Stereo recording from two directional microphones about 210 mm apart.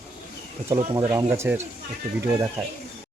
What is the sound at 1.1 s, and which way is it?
Speech, 10° right (ahead or behind).